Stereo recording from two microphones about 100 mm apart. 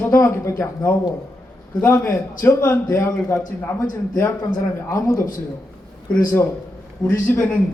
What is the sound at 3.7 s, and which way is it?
Speech, 35° left (ahead or behind).